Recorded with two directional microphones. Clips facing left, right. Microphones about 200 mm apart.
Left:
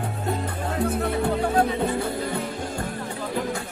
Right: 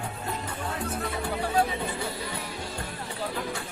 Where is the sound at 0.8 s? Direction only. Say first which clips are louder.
Left 9 dB; 55° left (ahead or behind).